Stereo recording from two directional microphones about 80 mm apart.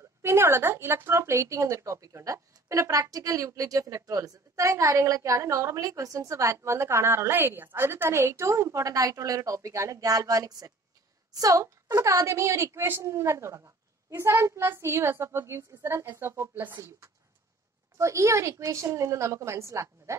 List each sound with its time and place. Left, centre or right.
0.2 s speech: right
17.9 s speech: right